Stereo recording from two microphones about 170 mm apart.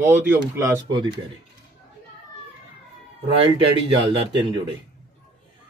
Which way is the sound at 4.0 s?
30° right (ahead or behind).